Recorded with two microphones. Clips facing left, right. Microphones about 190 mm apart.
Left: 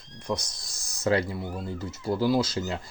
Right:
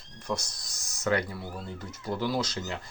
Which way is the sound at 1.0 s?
30° left (ahead or behind).